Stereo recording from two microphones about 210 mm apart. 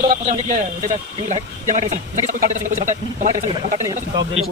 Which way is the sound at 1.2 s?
35° right (ahead or behind).